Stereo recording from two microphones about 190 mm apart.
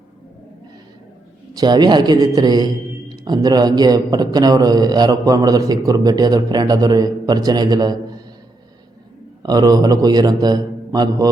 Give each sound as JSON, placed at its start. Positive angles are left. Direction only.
{"t": 1.5, "sound": "a man's voice", "side_deg": -20}
{"t": 9.4, "sound": "a man's voice", "side_deg": -20}